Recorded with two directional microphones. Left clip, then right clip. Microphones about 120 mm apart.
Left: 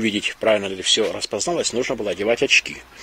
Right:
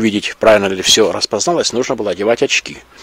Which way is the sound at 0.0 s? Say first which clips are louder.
Right 8 dB; 50° right (ahead or behind).